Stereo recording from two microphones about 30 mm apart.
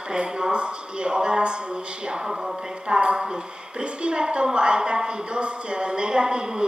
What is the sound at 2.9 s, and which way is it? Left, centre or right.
A woman's voice, right.